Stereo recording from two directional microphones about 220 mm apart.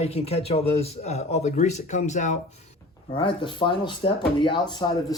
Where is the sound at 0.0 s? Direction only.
25° left (ahead or behind).